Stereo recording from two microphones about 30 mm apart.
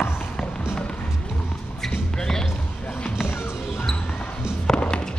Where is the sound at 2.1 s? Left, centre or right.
Left.